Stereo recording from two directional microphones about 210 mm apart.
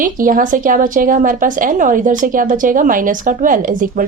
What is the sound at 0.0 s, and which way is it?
A woman's voice, 40° right (ahead or behind).